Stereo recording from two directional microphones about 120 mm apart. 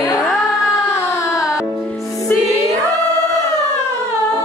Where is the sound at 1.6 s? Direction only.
15° left (ahead or behind).